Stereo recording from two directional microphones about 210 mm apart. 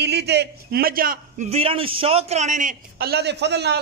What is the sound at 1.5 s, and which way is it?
A man's voice, 25° right (ahead or behind).